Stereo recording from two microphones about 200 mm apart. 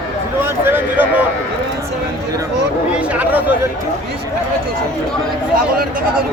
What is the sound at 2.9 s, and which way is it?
Speech, 5° right (ahead or behind).